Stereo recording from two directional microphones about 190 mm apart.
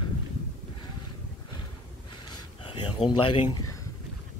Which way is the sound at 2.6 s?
25° left (ahead or behind).